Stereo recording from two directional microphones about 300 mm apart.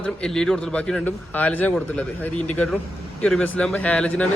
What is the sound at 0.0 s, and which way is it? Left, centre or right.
Speech, centre.